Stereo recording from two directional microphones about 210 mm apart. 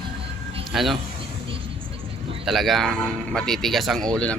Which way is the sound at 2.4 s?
Centre (ahead or behind).